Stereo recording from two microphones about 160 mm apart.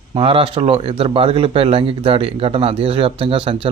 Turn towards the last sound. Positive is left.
turn(degrees=-35)  # may be behind; listen again after turning